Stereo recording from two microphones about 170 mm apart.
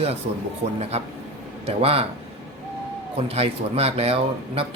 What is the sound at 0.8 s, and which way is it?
Speech, 40° right (ahead or behind).